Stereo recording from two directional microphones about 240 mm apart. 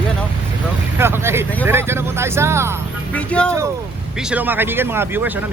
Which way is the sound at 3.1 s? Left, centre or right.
Centre.